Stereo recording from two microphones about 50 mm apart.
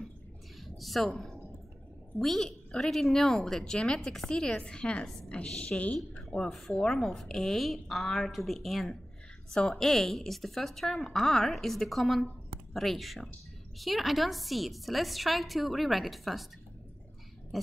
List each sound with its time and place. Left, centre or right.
0.7 s a woman's voice: centre
6.5 s a woman's voice: centre